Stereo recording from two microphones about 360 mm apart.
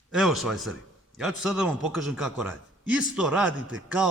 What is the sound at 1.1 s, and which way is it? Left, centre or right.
A man's voice, centre.